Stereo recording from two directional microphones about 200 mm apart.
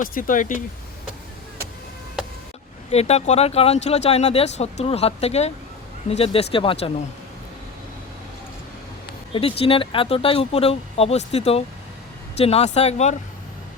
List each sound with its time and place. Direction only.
0.0 s speech: 40° left (ahead or behind)
2.9 s speech: 30° left (ahead or behind)
9.3 s speech: 30° left (ahead or behind)